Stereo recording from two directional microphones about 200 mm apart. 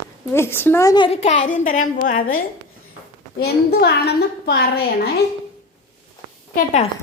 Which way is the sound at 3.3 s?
55° left (ahead or behind).